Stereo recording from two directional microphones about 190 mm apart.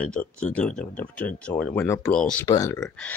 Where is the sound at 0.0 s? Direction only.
5° left (ahead or behind).